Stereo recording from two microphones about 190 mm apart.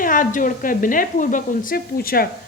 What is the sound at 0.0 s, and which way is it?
A woman's voice, 45° left (ahead or behind).